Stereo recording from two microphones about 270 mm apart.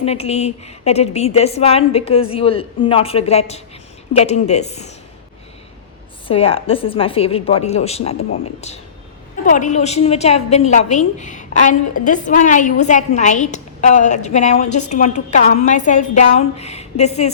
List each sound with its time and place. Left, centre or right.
0.0 s a woman's voice: left
6.2 s a woman's voice: left